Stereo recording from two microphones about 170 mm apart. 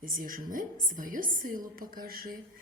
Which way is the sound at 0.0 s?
55° right (ahead or behind).